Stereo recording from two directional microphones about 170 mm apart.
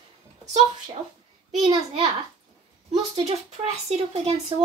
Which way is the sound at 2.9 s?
40° right (ahead or behind).